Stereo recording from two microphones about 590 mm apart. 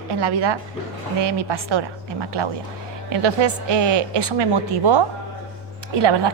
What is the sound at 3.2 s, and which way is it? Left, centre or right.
A woman's voice, right.